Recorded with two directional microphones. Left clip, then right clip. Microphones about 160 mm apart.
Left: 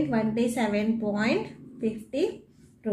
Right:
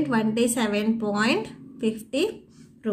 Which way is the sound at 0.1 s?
45° right (ahead or behind).